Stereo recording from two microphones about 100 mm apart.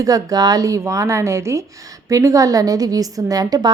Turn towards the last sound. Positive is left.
turn(degrees=-40)  # may be behind; listen again after turning